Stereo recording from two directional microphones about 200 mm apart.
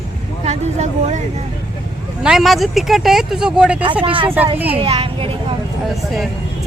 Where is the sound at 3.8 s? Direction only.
25° right (ahead or behind).